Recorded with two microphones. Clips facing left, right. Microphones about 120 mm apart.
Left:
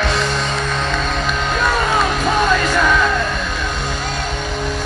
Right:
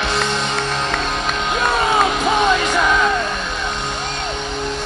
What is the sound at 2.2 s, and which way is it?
Music, 20° right (ahead or behind).